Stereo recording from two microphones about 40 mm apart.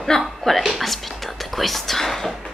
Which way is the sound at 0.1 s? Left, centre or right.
Centre.